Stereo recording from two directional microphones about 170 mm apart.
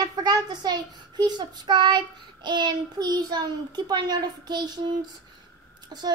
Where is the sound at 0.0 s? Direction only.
25° right (ahead or behind).